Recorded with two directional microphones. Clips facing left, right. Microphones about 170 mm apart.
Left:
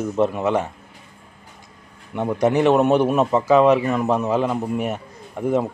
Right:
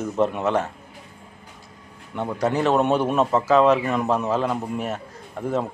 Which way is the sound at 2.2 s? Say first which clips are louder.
Left 4 dB; 15° left (ahead or behind).